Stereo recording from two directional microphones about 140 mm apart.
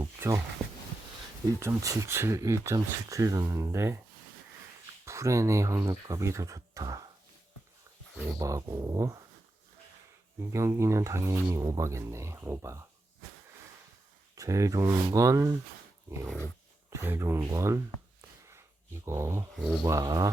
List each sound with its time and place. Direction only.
0.0 s a sound: 20° right (ahead or behind)
1.5 s speech: 20° right (ahead or behind)
5.0 s speech: 20° right (ahead or behind)
8.4 s speech: 25° right (ahead or behind)
10.5 s speech: 20° right (ahead or behind)
14.3 s speech: 25° right (ahead or behind)
16.0 s dog: 20° right (ahead or behind)
16.9 s speech: 15° right (ahead or behind)
18.2 s a sound: 20° right (ahead or behind)
19.0 s speech: 20° right (ahead or behind)
19.5 s speech: centre (ahead or behind)
19.8 s speech: 20° right (ahead or behind)